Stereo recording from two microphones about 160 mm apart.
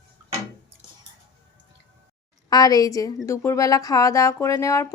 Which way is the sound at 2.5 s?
25° left (ahead or behind).